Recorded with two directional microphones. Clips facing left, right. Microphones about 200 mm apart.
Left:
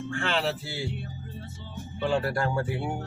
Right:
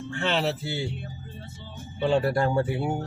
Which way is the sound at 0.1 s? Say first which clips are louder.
Right 3 dB; 20° right (ahead or behind).